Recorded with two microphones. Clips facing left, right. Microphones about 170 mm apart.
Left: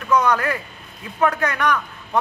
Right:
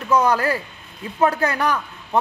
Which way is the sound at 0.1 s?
30° right (ahead or behind).